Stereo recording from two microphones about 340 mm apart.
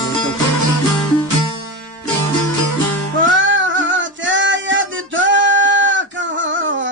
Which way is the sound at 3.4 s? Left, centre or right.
Right.